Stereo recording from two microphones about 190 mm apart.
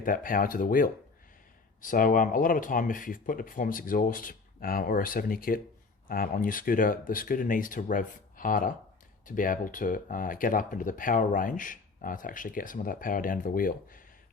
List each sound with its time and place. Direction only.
0.0 s speech: 45° left (ahead or behind)